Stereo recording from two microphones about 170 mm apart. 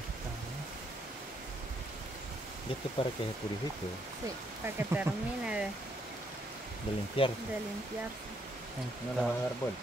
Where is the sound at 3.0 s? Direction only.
30° left (ahead or behind).